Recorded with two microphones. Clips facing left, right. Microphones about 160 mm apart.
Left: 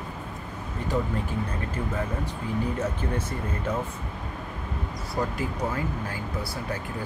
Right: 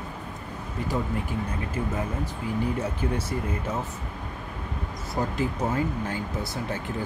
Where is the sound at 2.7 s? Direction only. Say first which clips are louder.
Even; 10° right (ahead or behind).